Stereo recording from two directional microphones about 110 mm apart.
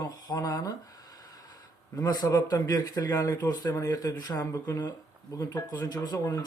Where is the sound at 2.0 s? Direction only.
30° left (ahead or behind).